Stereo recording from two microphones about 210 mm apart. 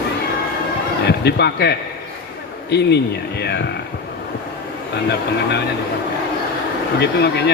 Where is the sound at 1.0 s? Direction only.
50° left (ahead or behind).